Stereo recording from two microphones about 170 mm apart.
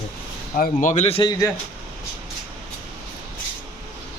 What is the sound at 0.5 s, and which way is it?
Speech, 50° left (ahead or behind).